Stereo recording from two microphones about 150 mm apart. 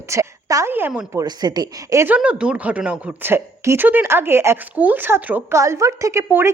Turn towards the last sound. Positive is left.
turn(degrees=-15)  # may be behind; listen again after turning